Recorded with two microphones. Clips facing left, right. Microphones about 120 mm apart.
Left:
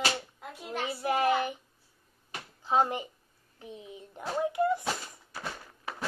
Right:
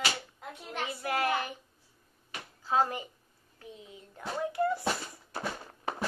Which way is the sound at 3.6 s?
20° left (ahead or behind).